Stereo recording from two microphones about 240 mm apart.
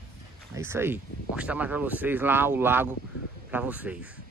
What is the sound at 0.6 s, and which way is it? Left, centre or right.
Speech, centre.